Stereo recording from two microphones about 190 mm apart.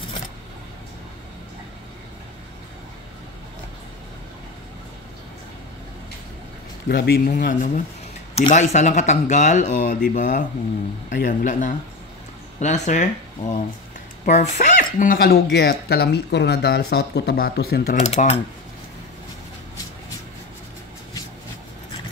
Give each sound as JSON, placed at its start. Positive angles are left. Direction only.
{"t": 6.9, "sound": "speech", "side_deg": 55}
{"t": 17.9, "sound": "speech", "side_deg": 35}